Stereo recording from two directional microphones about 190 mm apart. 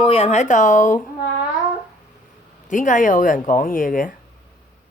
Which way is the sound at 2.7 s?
40° left (ahead or behind).